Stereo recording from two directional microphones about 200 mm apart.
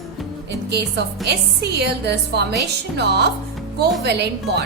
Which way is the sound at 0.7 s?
55° right (ahead or behind).